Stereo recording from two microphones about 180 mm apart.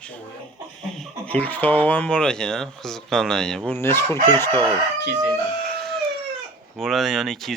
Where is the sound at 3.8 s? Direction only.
15° left (ahead or behind).